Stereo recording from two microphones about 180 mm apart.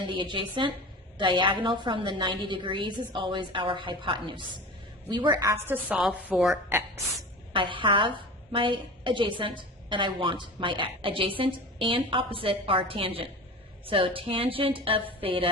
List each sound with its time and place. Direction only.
0.1 s a woman's voice: 30° right (ahead or behind)
7.5 s a woman's voice: 25° right (ahead or behind)